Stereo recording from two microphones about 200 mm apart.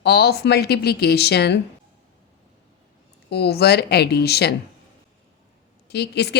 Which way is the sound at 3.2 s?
55° left (ahead or behind).